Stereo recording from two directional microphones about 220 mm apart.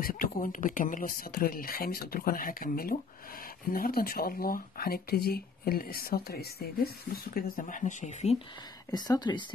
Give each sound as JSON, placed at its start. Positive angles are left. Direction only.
{"t": 0.0, "sound": "speech", "side_deg": 40}
{"t": 8.9, "sound": "speech", "side_deg": 20}